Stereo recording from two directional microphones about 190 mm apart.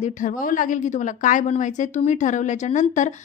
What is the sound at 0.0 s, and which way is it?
A woman's voice, 45° left (ahead or behind).